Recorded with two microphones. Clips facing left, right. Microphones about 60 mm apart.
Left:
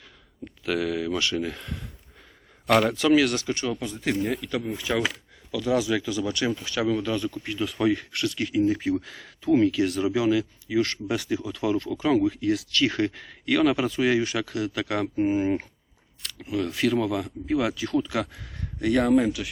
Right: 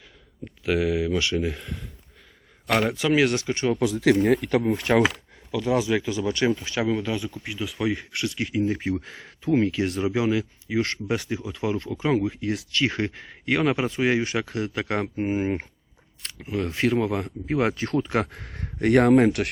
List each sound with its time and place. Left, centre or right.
0.6 s speech: centre
2.7 s speech: centre
3.8 s speech: right
4.2 s speech: right
5.5 s speech: right; by 7.9 s centre
7.9 s speech: right